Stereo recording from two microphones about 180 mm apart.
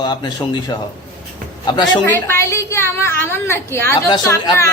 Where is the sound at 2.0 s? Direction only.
15° left (ahead or behind).